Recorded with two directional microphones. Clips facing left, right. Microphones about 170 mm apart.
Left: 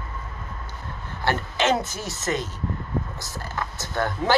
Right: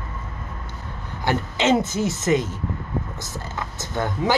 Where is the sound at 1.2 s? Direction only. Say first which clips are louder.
Right 2 dB; 20° right (ahead or behind).